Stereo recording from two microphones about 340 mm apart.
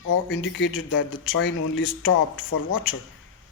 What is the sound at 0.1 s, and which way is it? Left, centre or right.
A man's voice, left.